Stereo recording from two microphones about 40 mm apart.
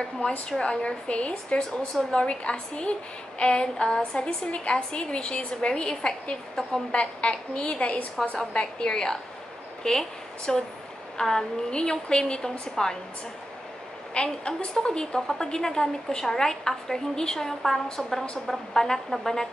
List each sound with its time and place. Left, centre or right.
0.6 s a woman's voice: left
4.5 s a woman's voice: left; by 12.9 s centre
14.1 s a woman's voice: left